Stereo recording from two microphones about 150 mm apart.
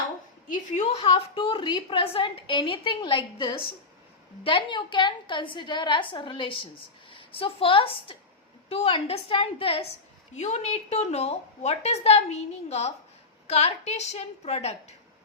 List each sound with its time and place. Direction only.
0.5 s a woman's voice: 55° left (ahead or behind)
0.9 s a woman's voice: 40° left (ahead or behind)
10.3 s a woman's voice: 45° left (ahead or behind)